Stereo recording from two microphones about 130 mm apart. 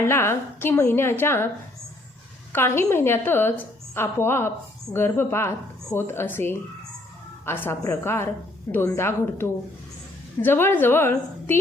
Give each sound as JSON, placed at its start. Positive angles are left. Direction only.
{"t": 0.1, "sound": "a woman's voice", "side_deg": 20}
{"t": 2.5, "sound": "a woman's voice", "side_deg": 20}